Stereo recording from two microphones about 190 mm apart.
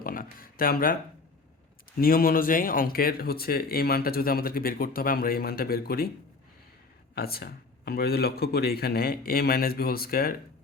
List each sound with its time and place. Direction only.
0.0 s a sound: 50° left (ahead or behind)
2.0 s speech: 50° left (ahead or behind)
7.2 s a man's voice: 55° left (ahead or behind)